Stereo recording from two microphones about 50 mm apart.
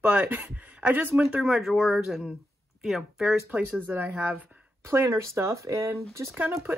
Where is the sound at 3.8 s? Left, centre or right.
Right.